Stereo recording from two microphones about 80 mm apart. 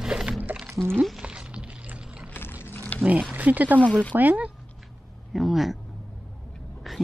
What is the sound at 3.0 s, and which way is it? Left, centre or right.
Speech, centre.